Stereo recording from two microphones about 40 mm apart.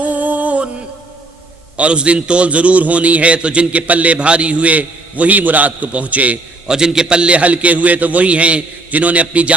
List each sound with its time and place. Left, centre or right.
0.0 s music: right
1.7 s a man's voice: right
6.7 s a man's voice: centre; by 9.6 s right